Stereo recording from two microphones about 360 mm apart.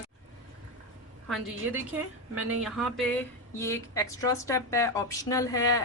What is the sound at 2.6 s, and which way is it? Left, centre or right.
Speech, centre.